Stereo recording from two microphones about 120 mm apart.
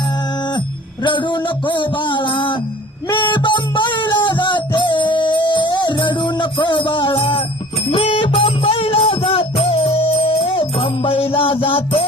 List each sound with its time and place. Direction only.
1.0 s music: 40° left (ahead or behind)